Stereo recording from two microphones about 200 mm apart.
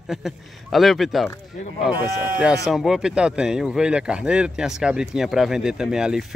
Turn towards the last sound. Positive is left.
turn(degrees=-5)  # may be behind; listen again after turning